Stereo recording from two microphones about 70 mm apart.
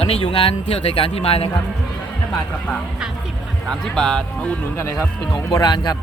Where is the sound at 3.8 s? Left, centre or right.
Centre.